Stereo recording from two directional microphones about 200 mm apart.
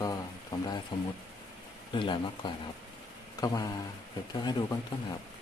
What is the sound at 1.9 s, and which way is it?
Speech, 25° left (ahead or behind).